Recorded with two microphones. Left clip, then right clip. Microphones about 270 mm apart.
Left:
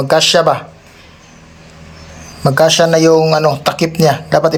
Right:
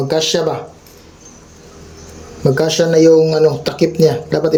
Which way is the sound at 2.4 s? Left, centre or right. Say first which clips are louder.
Left 4 dB; centre.